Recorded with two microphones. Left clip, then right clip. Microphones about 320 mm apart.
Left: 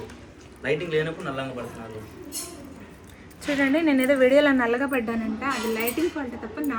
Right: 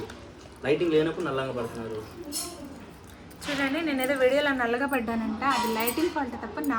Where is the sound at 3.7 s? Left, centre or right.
Centre.